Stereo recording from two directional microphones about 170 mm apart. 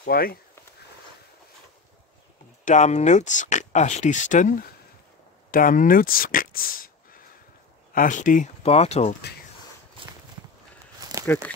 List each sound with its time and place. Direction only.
0.0 s speech: 65° left (ahead or behind)
2.6 s speech: 45° left (ahead or behind)
11.0 s a sound: 20° right (ahead or behind)